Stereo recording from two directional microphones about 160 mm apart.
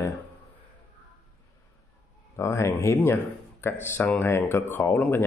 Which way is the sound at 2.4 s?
15° left (ahead or behind).